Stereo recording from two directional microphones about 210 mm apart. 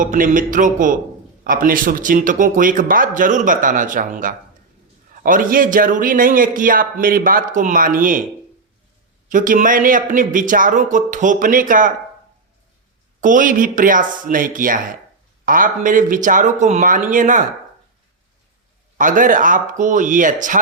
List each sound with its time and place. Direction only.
0.0 s a man's voice: 40° right (ahead or behind)
9.3 s a man's voice: 40° right (ahead or behind)
13.2 s a man's voice: 40° right (ahead or behind)
18.9 s a man's voice: 40° right (ahead or behind)